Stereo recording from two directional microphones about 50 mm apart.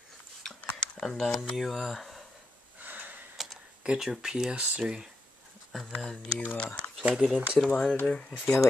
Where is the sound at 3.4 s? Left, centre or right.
Centre.